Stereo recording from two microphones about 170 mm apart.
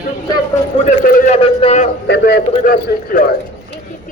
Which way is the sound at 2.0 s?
90° left.